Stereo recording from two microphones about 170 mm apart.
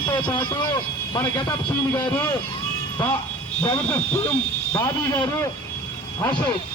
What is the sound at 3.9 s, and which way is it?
Speech, 10° left (ahead or behind).